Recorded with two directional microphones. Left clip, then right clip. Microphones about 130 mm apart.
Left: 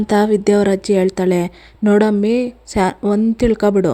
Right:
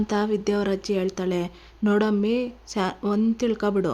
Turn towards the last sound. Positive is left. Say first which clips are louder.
# left 9 dB
turn(degrees=40)  # may be behind; listen again after turning